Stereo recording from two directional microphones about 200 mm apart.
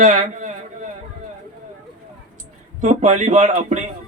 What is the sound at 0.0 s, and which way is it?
Speech, 40° right (ahead or behind).